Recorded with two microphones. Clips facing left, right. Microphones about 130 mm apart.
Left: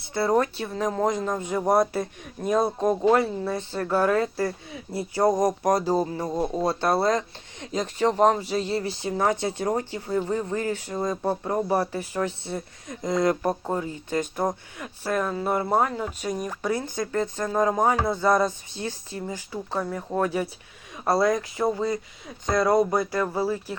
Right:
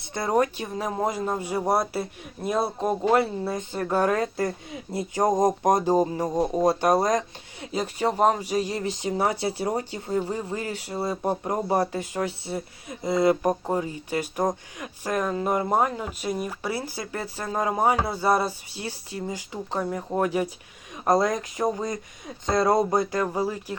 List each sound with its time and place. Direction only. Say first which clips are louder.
0.1 s speech: left 1 dB; 15° right (ahead or behind)
12.5 s speech: right 1 dB; 5° right (ahead or behind)